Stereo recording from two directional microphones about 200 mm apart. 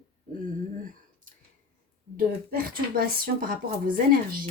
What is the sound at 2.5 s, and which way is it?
Speech, 50° right (ahead or behind).